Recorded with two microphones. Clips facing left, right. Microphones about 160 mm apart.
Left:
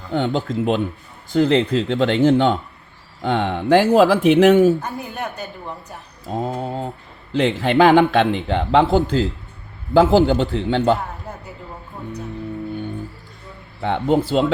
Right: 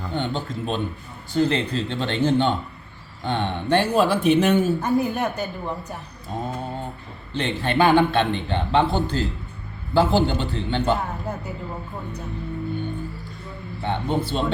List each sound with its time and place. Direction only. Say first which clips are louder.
0.1 s speech: left 7 dB; 90° left
4.8 s a woman's voice: right 6 dB; 5° right (ahead or behind)
6.2 s speech: left 5 dB; 90° left
13.8 s speech: left 6 dB; 90° left